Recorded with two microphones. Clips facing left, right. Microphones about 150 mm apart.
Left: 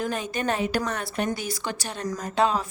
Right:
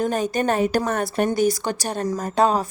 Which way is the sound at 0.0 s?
40° right (ahead or behind).